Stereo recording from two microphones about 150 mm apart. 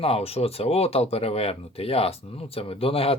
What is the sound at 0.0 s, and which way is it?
Speech, 40° left (ahead or behind).